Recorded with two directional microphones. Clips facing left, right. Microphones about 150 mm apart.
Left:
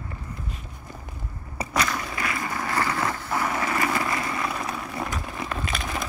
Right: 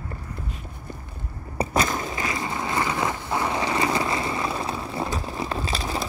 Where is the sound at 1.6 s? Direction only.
25° right (ahead or behind).